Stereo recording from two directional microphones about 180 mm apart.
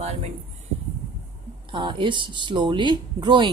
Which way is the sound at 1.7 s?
25° right (ahead or behind).